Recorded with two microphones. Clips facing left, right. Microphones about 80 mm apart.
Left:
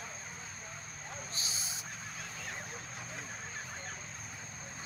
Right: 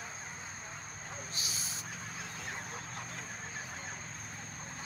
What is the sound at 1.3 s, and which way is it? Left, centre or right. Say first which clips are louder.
Owl: even; left.